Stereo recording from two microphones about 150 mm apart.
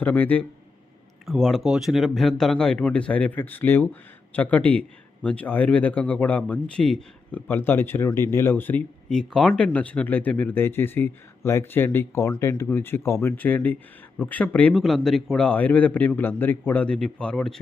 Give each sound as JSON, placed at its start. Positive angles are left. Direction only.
{"t": 0.0, "sound": "speech", "side_deg": 10}